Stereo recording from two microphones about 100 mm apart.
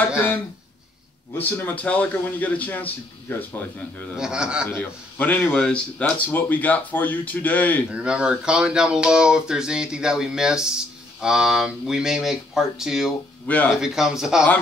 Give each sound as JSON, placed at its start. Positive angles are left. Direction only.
{"t": 1.4, "sound": "a man's voice", "side_deg": 20}
{"t": 4.2, "sound": "speech", "side_deg": -10}
{"t": 4.6, "sound": "a man's voice", "side_deg": 20}
{"t": 7.9, "sound": "speech", "side_deg": -10}